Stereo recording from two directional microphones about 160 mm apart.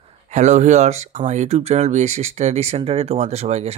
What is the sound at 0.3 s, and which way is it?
Speech, 50° right (ahead or behind).